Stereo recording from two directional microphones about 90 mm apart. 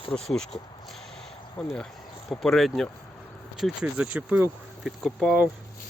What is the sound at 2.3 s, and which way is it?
Speech, centre (ahead or behind).